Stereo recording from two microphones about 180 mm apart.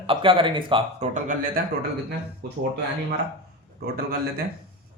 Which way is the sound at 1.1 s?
45° right (ahead or behind).